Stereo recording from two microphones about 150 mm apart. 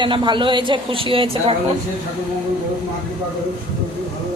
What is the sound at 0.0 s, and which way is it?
A woman's voice, 35° right (ahead or behind).